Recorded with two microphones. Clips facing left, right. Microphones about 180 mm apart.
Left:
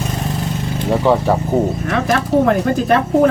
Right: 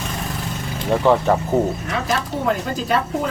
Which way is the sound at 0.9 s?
10° left (ahead or behind).